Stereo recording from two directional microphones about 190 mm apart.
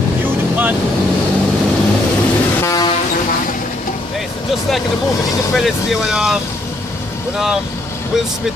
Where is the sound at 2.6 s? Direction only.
20° left (ahead or behind).